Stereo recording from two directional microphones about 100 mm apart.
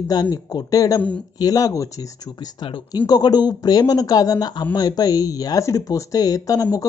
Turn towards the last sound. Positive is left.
turn(degrees=35)  # may be behind; listen again after turning